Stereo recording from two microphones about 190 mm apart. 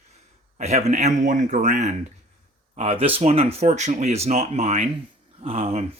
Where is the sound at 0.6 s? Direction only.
35° right (ahead or behind).